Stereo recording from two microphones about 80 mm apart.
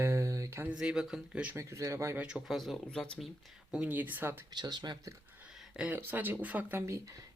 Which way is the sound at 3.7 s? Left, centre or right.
Centre.